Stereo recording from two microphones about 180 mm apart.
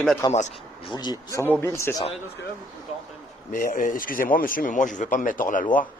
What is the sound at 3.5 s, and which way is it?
Speech, 50° left (ahead or behind).